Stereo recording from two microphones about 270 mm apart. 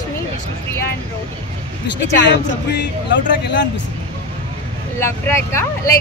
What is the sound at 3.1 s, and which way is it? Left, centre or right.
Speech, left.